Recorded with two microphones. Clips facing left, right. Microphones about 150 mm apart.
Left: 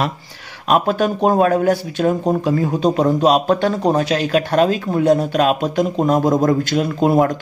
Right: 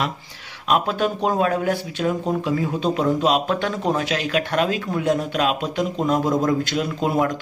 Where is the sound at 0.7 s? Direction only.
45° left (ahead or behind).